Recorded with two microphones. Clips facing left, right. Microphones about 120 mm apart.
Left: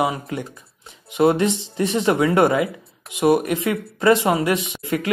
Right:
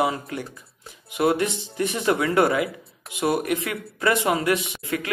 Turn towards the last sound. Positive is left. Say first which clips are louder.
# left 5 dB
turn(degrees=25)  # may be behind; listen again after turning